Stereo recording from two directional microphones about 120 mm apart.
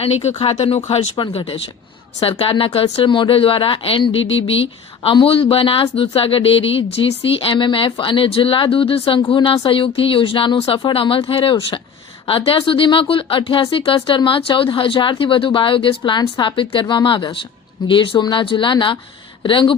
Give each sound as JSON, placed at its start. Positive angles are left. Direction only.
{"t": 0.0, "sound": "speech", "side_deg": 65}
{"t": 1.1, "sound": "speech", "side_deg": 40}